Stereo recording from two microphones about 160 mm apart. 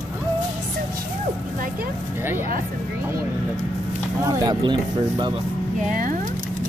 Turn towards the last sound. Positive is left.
turn(degrees=-55)  # may be behind; listen again after turning